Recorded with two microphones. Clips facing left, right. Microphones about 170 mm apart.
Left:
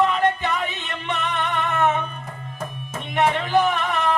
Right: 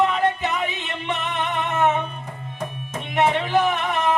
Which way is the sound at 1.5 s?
20° right (ahead or behind).